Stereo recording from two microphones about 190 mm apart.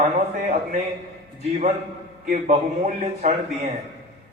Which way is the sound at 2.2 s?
40° right (ahead or behind).